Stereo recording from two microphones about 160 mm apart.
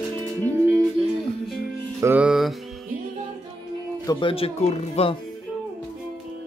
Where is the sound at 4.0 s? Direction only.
30° left (ahead or behind).